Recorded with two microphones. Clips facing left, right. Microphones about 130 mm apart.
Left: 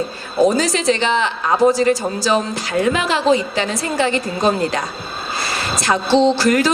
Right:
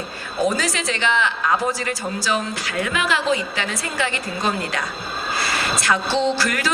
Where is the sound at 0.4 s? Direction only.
30° left (ahead or behind).